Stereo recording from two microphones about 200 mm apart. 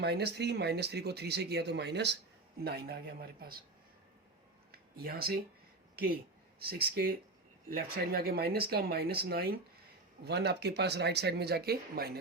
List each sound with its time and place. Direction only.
0.0 s a man's voice: 55° right (ahead or behind)
4.9 s a man's voice: 50° right (ahead or behind)
6.6 s a man's voice: 50° right (ahead or behind)